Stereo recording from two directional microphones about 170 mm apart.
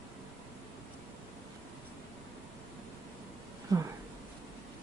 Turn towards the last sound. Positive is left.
turn(degrees=-20)  # may be behind; listen again after turning